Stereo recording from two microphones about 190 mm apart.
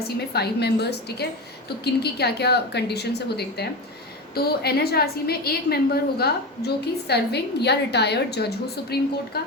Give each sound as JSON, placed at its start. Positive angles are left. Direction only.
{"t": 0.0, "sound": "a woman's voice", "side_deg": 60}